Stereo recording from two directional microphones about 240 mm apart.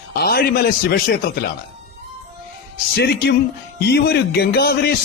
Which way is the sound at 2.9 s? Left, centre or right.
Left.